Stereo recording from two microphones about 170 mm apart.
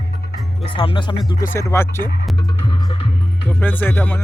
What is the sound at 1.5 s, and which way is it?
Speech, 15° left (ahead or behind).